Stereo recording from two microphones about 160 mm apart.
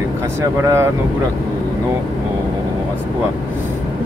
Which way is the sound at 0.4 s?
15° right (ahead or behind).